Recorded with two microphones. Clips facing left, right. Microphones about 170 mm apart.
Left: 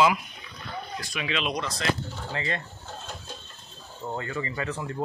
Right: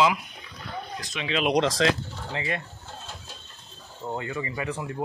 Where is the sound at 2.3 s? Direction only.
15° right (ahead or behind).